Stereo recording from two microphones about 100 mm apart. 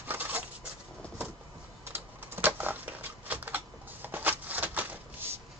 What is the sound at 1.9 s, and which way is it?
Typewriter, 20° right (ahead or behind).